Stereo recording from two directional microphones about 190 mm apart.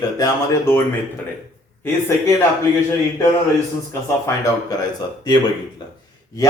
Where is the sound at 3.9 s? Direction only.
15° left (ahead or behind).